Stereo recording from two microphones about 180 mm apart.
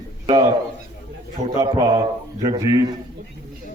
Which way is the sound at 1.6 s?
25° right (ahead or behind).